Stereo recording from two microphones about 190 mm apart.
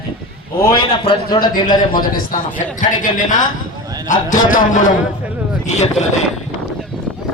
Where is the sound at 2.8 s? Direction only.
45° left (ahead or behind).